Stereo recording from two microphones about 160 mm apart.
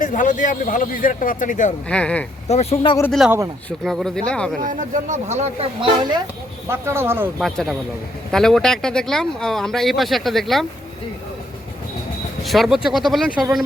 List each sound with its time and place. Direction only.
0.0 s a man's voice: 55° left (ahead or behind)
1.9 s speech: 5° left (ahead or behind)
2.5 s speech: 40° left (ahead or behind)
3.1 s speech: centre (ahead or behind)
4.6 s speech: 55° right (ahead or behind); by 6.2 s 30° right (ahead or behind)
6.7 s speech: 15° right (ahead or behind)
7.3 s speech: 5° left (ahead or behind)
12.4 s speech: centre (ahead or behind)